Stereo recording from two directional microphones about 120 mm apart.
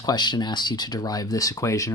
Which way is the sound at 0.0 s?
35° left (ahead or behind).